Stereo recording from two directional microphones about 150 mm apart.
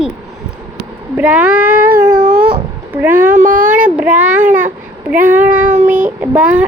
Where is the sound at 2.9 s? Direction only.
10° right (ahead or behind).